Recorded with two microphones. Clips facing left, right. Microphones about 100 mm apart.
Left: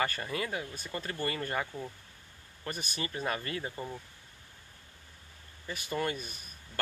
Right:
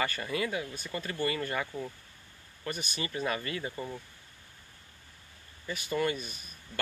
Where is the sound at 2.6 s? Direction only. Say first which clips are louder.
Right 1 dB; 40° left (ahead or behind).